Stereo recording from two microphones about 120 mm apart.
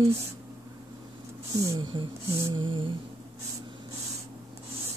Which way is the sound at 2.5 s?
45° right (ahead or behind).